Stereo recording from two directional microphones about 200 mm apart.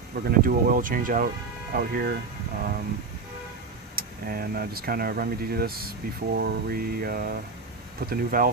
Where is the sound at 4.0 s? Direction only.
50° right (ahead or behind).